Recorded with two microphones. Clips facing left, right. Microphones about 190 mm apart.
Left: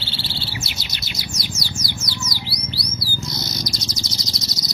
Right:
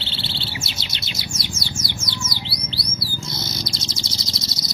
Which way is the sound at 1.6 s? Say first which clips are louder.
Even; 25° right (ahead or behind).